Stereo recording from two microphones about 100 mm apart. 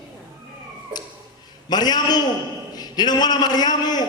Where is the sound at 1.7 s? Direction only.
45° left (ahead or behind).